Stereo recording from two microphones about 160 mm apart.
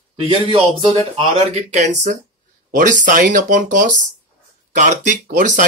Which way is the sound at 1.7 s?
45° right (ahead or behind).